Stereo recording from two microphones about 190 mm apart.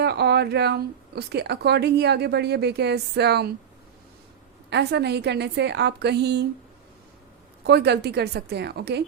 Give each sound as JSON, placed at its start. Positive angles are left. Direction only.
{"t": 0.0, "sound": "a woman's voice", "side_deg": -60}
{"t": 4.7, "sound": "a woman's voice", "side_deg": -60}
{"t": 7.6, "sound": "a woman's voice", "side_deg": -60}